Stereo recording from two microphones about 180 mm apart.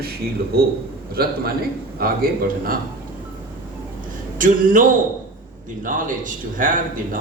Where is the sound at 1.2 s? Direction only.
60° right (ahead or behind).